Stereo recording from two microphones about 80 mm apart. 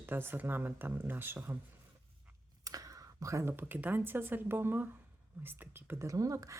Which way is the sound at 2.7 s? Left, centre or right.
Right.